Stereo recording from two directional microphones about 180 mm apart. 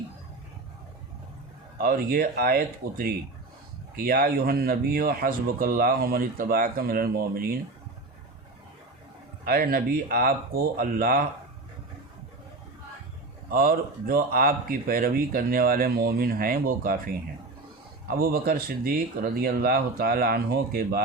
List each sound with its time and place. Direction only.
1.8 s speech: 55° right (ahead or behind)
9.4 s speech: 55° right (ahead or behind)
13.5 s speech: 55° right (ahead or behind)
18.1 s speech: 55° right (ahead or behind)